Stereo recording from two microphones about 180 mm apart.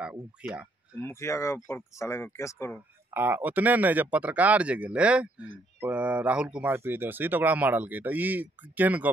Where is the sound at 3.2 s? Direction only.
10° right (ahead or behind).